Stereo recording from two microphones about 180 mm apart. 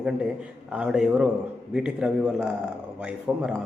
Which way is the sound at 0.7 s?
5° right (ahead or behind).